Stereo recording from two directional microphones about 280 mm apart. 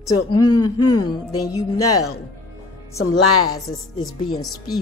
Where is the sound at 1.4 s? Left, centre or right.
Left.